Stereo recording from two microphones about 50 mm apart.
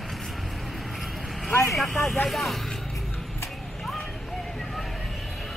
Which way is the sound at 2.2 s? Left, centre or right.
Centre.